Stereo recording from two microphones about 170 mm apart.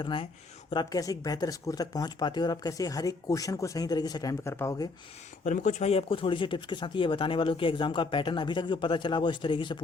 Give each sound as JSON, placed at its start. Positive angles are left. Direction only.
{"t": 0.0, "sound": "speech", "side_deg": 30}
{"t": 5.5, "sound": "speech", "side_deg": 45}